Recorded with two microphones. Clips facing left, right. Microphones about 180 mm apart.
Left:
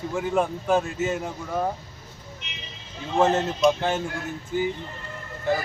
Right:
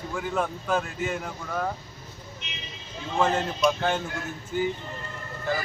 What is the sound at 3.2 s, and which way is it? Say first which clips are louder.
Speech: left 4 dB; 20° left (ahead or behind).